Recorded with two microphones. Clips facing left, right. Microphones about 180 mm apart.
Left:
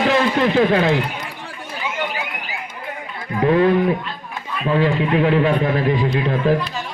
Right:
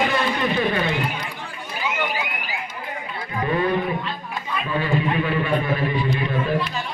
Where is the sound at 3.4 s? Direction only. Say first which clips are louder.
Left 7 dB; 90° left.